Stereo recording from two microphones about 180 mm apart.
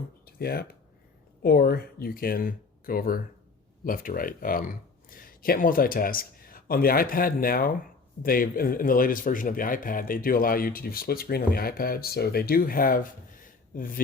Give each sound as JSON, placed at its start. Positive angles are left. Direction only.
{"t": 0.3, "sound": "speech", "side_deg": 60}